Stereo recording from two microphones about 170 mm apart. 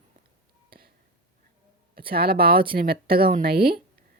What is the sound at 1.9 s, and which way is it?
Speech, 60° right (ahead or behind).